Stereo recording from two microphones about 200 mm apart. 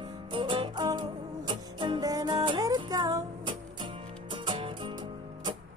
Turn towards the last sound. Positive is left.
turn(degrees=-25)  # may be behind; listen again after turning